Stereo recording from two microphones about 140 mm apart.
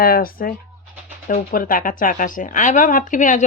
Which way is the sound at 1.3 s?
75° left (ahead or behind).